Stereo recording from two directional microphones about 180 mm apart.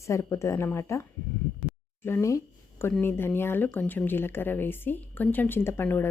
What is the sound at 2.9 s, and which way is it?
Speech, 10° left (ahead or behind).